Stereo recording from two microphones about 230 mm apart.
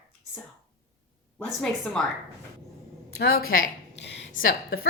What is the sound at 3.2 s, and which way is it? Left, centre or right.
Speech, left.